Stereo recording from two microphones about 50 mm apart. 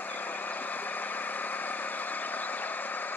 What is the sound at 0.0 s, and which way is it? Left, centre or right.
Vehicle, left.